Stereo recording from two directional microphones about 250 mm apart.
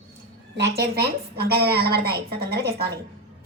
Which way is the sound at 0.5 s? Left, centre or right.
Right.